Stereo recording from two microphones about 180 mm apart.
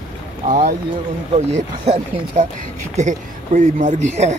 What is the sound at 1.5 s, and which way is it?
Speech, 40° right (ahead or behind).